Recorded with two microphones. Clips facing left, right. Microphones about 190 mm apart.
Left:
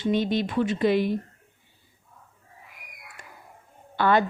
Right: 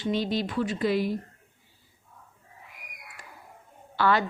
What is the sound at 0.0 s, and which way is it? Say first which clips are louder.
A woman's voice: left 3 dB; 20° left (ahead or behind).